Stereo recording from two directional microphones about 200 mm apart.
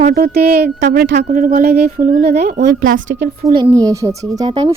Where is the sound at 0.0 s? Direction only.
50° right (ahead or behind).